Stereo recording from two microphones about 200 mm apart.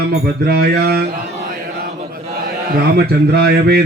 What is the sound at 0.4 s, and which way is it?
Speech, 50° right (ahead or behind).